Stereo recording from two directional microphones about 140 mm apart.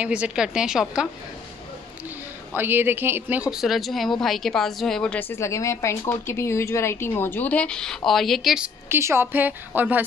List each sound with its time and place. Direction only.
0.0 s a woman's voice: 10° right (ahead or behind)
2.5 s a woman's voice: 15° right (ahead or behind); by 5.4 s 5° left (ahead or behind)
5.4 s a woman's voice: 20° left (ahead or behind); by 8.6 s centre (ahead or behind)
8.8 s speech: 20° right (ahead or behind)